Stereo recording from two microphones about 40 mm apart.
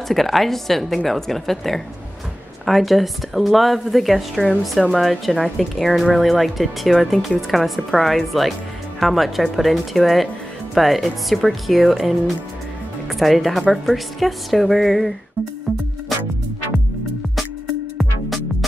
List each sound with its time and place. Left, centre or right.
0.1 s speech: centre